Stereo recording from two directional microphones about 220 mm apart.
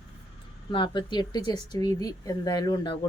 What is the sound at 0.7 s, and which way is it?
Speech, 20° left (ahead or behind).